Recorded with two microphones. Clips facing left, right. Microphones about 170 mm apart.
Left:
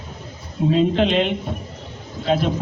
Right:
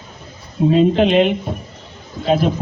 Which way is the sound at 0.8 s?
15° right (ahead or behind).